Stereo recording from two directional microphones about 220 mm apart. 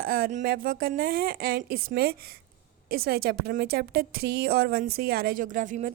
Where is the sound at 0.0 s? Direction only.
40° right (ahead or behind).